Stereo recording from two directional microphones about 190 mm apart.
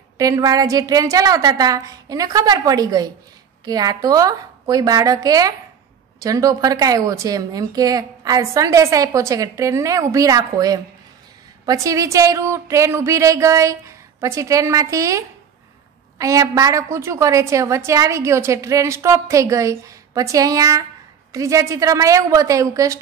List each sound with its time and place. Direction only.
0.2 s a woman's voice: 20° right (ahead or behind)